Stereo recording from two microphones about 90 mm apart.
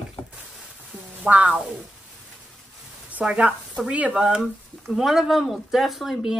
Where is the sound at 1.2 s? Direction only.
15° right (ahead or behind).